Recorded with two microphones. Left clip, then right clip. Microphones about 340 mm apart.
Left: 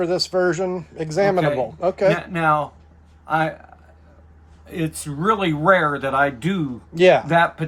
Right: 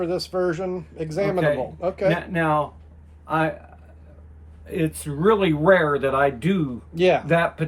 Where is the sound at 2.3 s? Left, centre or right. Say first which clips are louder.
Left 3 dB; centre.